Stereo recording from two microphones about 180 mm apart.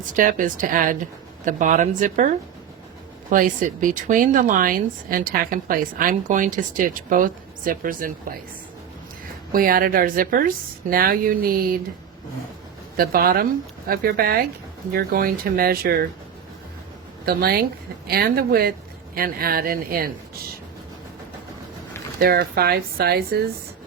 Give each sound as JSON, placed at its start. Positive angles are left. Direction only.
{"t": 0.0, "sound": "speech", "side_deg": -45}
{"t": 9.5, "sound": "speech", "side_deg": -55}
{"t": 13.0, "sound": "speech", "side_deg": -55}
{"t": 17.2, "sound": "speech", "side_deg": -60}
{"t": 22.2, "sound": "speech", "side_deg": -60}